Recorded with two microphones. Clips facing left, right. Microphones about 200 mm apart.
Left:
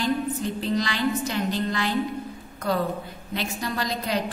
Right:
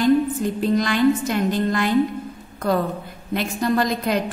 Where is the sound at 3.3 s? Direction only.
50° right (ahead or behind).